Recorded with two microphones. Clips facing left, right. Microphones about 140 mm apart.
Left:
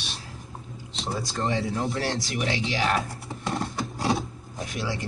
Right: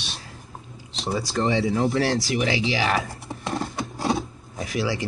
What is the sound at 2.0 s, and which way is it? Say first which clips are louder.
Speech: right 6 dB; centre (ahead or behind).